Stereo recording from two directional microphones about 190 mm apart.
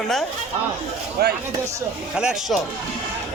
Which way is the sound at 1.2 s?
55° right (ahead or behind).